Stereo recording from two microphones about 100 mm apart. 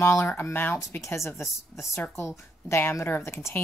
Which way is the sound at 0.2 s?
20° left (ahead or behind).